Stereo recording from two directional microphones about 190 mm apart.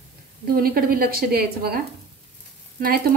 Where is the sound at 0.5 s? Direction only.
50° right (ahead or behind).